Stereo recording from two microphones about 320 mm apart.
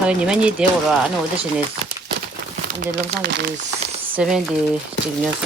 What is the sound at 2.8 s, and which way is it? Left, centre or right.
Speech, right.